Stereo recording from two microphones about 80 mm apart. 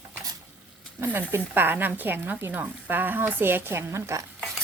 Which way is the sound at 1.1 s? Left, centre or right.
Right.